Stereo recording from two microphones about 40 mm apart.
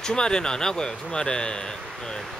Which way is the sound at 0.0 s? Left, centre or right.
Left.